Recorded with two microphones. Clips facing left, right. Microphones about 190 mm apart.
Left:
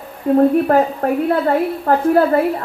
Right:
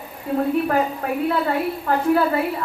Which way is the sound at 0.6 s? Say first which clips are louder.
Left 6 dB; 50° left (ahead or behind).